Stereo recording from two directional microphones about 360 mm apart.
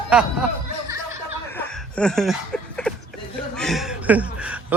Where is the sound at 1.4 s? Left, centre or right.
Centre.